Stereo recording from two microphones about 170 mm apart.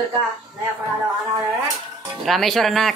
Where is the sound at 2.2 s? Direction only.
Centre (ahead or behind).